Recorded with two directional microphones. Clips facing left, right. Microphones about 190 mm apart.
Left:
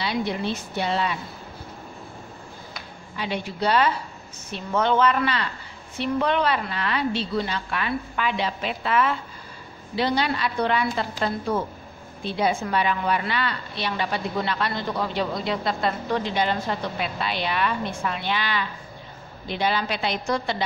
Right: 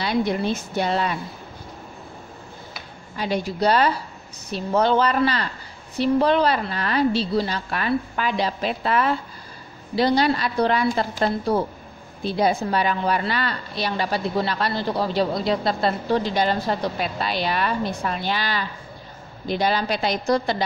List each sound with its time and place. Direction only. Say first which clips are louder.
0.0 s speech: right 4 dB; 45° right (ahead or behind)
3.2 s a woman's voice: right 4 dB; 40° right (ahead or behind)